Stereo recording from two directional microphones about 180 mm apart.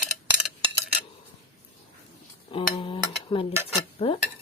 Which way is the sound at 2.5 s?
30° left (ahead or behind).